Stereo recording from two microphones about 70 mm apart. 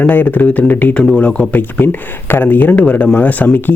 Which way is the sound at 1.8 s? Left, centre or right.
Left.